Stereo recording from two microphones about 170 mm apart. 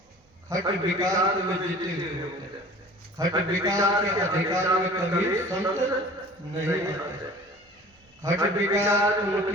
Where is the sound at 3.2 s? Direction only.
20° right (ahead or behind).